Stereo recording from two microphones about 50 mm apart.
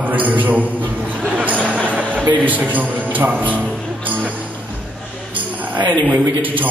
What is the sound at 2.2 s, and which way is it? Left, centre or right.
Speech, right.